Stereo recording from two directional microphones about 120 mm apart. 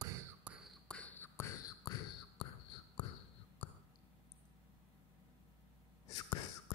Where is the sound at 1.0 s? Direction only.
15° left (ahead or behind).